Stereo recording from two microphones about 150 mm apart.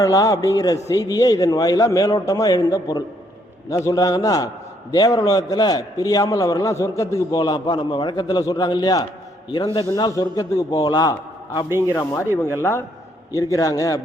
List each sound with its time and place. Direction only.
0.0 s a man's voice: 25° left (ahead or behind)